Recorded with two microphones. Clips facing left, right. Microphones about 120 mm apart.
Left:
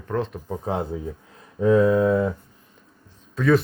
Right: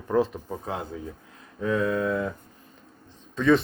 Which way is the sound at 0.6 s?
30° left (ahead or behind).